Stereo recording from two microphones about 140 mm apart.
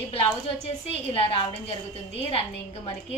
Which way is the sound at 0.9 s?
40° left (ahead or behind).